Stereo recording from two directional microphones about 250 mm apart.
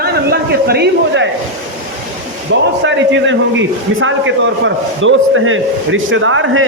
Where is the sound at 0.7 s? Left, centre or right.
Right.